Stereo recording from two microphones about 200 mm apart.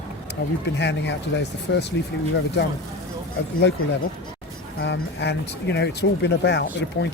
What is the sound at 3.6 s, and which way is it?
Speech, 60° left (ahead or behind).